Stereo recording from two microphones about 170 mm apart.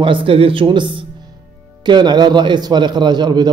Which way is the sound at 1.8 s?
25° right (ahead or behind).